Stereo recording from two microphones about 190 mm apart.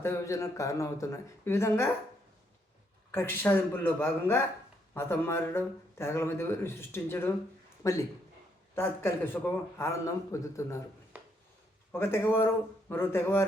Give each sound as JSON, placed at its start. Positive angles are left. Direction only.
{"t": 0.0, "sound": "speech", "side_deg": 15}
{"t": 3.1, "sound": "speech", "side_deg": 10}
{"t": 11.1, "sound": "a sound", "side_deg": -10}
{"t": 11.9, "sound": "speech", "side_deg": 10}